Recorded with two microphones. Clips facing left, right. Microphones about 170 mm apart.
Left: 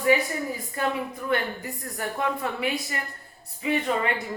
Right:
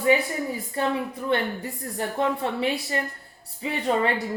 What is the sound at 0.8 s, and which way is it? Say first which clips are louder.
Speech: right 2 dB; 30° right (ahead or behind).